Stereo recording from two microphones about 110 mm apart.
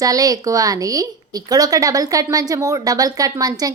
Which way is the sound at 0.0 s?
35° right (ahead or behind).